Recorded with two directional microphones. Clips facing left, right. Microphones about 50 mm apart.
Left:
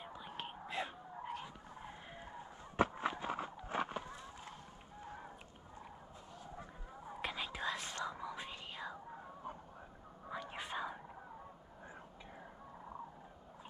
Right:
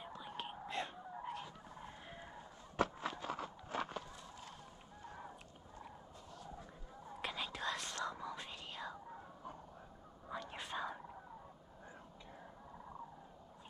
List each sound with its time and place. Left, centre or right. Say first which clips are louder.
0.0 s whispering: even; centre
2.8 s a sound: left 3 dB; left
7.2 s whispering: left 1 dB; centre
10.3 s whispering: left 1 dB; centre